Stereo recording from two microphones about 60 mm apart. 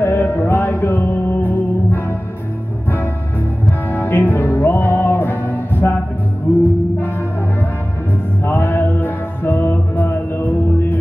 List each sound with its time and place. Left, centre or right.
0.0 s music: left
3.9 s music: left
8.5 s music: left